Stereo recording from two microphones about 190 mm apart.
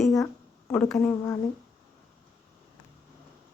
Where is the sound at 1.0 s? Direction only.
15° left (ahead or behind).